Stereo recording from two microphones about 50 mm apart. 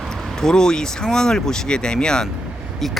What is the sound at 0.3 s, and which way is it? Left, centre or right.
Speech, centre.